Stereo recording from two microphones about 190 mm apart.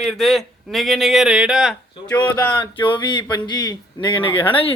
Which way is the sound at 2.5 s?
25° left (ahead or behind).